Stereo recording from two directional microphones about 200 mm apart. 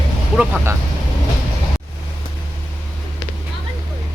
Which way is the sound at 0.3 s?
10° right (ahead or behind).